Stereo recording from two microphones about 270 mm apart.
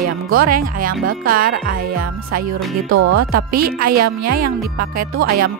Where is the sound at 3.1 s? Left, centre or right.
Right.